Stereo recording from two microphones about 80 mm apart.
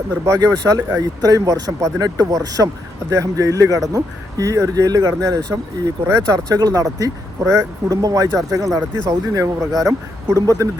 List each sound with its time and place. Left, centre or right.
0.3 s speech: right